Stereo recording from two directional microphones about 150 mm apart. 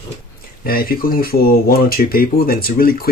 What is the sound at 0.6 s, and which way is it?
Speech, 75° left (ahead or behind).